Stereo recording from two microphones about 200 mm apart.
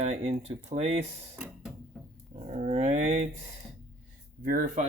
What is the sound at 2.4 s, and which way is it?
Speech, 35° right (ahead or behind).